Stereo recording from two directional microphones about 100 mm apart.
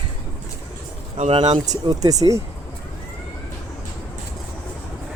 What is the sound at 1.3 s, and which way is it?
Speech, 55° right (ahead or behind).